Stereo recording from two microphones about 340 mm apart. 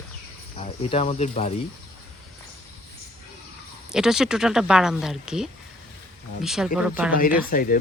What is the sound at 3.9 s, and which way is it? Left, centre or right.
Speech, centre.